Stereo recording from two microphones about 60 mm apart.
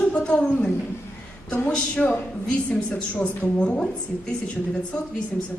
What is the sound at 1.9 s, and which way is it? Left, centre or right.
A woman's voice, left.